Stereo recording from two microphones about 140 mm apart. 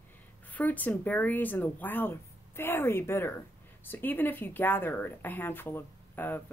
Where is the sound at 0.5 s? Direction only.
10° left (ahead or behind).